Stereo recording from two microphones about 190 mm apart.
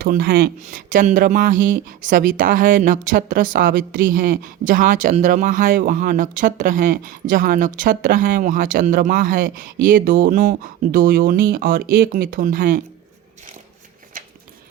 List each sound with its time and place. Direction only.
0.0 s speech: 55° right (ahead or behind)